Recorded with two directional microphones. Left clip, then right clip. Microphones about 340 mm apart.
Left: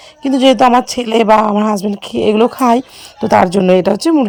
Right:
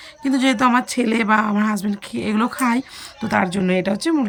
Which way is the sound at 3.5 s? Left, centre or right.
Centre.